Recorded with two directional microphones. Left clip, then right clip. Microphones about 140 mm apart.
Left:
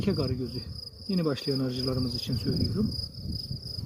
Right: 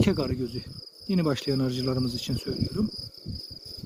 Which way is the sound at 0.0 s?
55° right (ahead or behind).